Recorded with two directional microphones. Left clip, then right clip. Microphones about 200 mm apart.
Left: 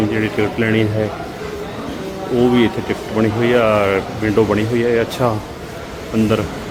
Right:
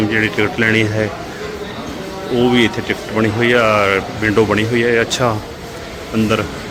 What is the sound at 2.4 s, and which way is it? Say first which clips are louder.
Speech: right 1 dB; 5° left (ahead or behind).